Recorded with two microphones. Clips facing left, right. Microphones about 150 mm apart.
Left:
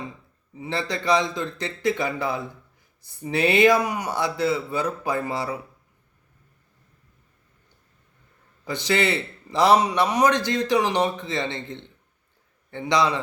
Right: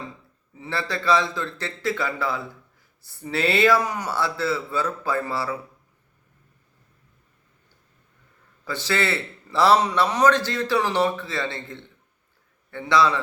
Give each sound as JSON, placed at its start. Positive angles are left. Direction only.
{"t": 0.6, "sound": "a man's voice", "side_deg": 20}
{"t": 8.6, "sound": "a man's voice", "side_deg": 15}